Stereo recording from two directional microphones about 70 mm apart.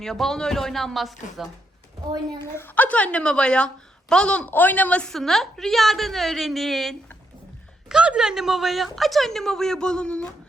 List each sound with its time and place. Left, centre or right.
0.0 s speech: centre
2.4 s a woman's voice: left
2.7 s a woman's voice: left
5.1 s speech: centre
7.9 s speech: centre